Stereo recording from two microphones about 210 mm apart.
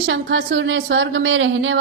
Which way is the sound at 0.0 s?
65° right (ahead or behind).